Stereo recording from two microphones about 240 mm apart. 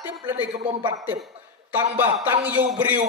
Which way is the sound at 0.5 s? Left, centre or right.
Right.